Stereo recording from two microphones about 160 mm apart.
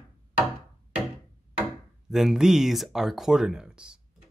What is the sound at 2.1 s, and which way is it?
Speech, centre (ahead or behind).